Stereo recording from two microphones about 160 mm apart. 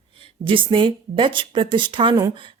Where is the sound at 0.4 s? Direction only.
30° right (ahead or behind).